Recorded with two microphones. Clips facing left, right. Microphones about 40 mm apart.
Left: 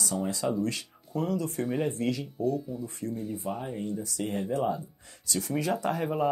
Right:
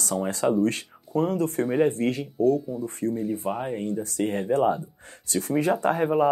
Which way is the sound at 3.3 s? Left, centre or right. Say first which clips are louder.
Right 5 dB; right.